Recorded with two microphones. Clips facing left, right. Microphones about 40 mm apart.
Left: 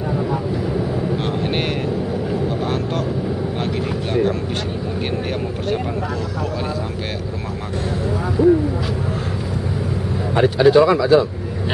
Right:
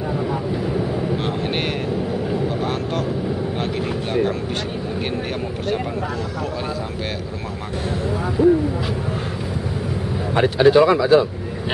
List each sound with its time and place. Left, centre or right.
1.1 s vehicle: centre
4.1 s speech: centre
8.4 s speech: right
10.3 s speech: centre